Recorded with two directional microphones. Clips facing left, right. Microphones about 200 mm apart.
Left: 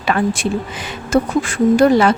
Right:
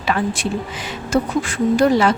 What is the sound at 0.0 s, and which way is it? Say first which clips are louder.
A woman's voice: left 3 dB; 55° left (ahead or behind).